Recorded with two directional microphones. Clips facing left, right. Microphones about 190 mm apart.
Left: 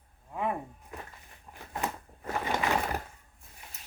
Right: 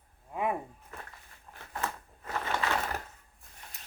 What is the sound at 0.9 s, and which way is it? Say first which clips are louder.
Walk: left 3 dB; 15° left (ahead or behind).